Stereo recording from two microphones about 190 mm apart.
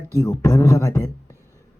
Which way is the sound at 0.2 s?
15° left (ahead or behind).